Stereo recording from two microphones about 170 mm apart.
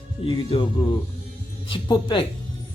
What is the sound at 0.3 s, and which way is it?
Speech, 30° left (ahead or behind).